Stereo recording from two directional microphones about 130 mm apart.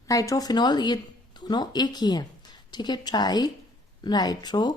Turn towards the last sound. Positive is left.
turn(degrees=35)  # may be behind; listen again after turning